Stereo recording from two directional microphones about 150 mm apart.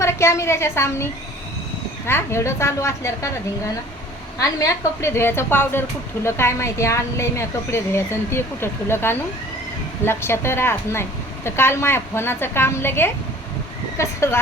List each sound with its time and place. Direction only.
0.0 s a woman's voice: 20° left (ahead or behind)
4.4 s a woman's voice: 20° left (ahead or behind)